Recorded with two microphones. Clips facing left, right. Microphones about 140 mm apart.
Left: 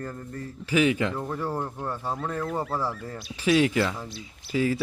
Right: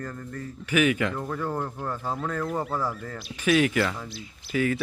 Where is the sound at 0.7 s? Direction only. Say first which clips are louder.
Even; 30° left (ahead or behind).